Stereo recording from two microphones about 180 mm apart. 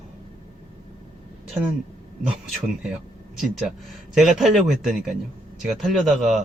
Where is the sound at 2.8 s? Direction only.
5° right (ahead or behind).